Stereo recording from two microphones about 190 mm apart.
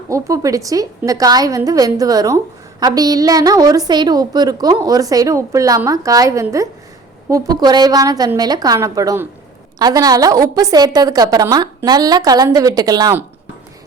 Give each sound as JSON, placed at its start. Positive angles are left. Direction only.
{"t": 0.1, "sound": "a woman's voice", "side_deg": -15}